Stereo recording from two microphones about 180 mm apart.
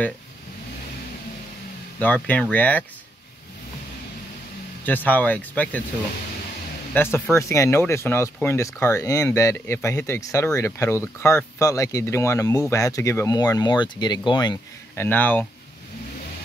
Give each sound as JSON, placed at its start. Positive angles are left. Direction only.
{"t": 2.0, "sound": "speech", "side_deg": 10}
{"t": 4.8, "sound": "speech", "side_deg": 10}
{"t": 6.9, "sound": "speech", "side_deg": 10}
{"t": 15.0, "sound": "speech", "side_deg": 10}